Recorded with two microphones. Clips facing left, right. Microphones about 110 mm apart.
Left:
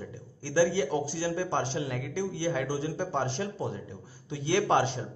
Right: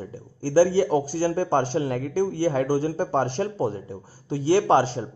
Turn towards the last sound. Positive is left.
turn(degrees=-35)  # may be behind; listen again after turning